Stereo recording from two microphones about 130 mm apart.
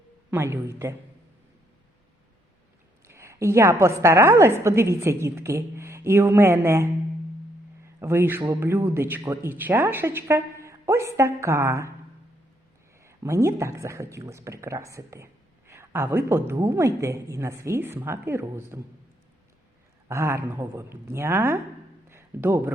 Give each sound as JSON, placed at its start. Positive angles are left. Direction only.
{"t": 0.3, "sound": "a woman's voice", "side_deg": -20}
{"t": 3.1, "sound": "a woman's voice", "side_deg": -20}
{"t": 7.9, "sound": "a man's voice", "side_deg": -20}
{"t": 13.0, "sound": "a woman's voice", "side_deg": -20}
{"t": 20.1, "sound": "a woman's voice", "side_deg": -20}
{"t": 22.1, "sound": "a sound", "side_deg": -15}